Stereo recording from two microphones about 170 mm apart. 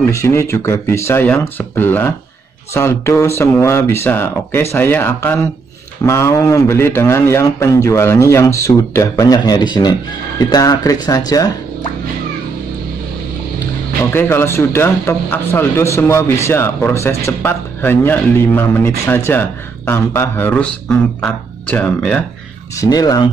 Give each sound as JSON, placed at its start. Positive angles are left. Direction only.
{"t": 0.1, "sound": "speech", "side_deg": 15}
{"t": 14.1, "sound": "speech", "side_deg": 15}
{"t": 22.8, "sound": "speech", "side_deg": 20}